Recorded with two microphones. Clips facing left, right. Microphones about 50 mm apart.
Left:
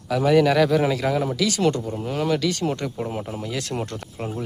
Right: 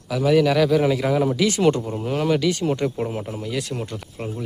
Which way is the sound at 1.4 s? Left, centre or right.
Right.